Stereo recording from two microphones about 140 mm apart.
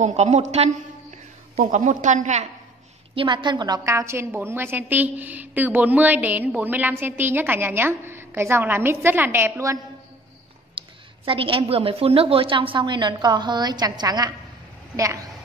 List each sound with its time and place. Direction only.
0.0 s a woman's voice: 50° right (ahead or behind)
3.2 s speech: 35° right (ahead or behind)
3.9 s a woman's voice: 20° right (ahead or behind)
10.7 s speech: 40° right (ahead or behind)